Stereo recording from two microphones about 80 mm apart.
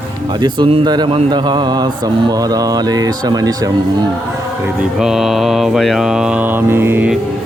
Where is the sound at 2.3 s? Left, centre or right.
Right.